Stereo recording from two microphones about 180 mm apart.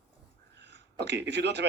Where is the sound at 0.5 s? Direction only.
75° right (ahead or behind).